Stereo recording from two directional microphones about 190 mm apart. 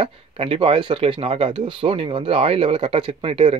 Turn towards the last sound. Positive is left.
turn(degrees=-30)  # may be behind; listen again after turning